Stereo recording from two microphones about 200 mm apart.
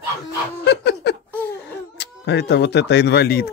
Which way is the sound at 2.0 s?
60° left (ahead or behind).